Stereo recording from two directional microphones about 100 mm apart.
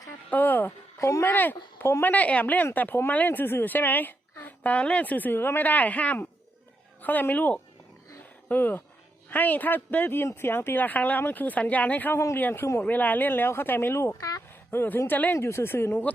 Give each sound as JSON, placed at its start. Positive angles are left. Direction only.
{"t": 0.3, "sound": "speech", "side_deg": 20}
{"t": 0.9, "sound": "speech", "side_deg": 30}
{"t": 14.7, "sound": "speech", "side_deg": 20}